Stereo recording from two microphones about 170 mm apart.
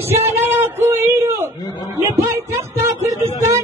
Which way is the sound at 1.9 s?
15° right (ahead or behind).